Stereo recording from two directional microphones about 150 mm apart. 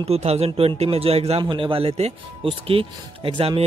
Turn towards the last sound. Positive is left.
turn(degrees=-35)  # may be behind; listen again after turning